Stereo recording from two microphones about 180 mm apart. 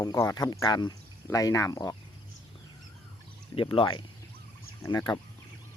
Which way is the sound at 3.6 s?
30° left (ahead or behind).